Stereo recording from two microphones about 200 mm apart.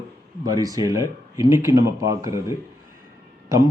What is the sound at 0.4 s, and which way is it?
Speech, 20° right (ahead or behind).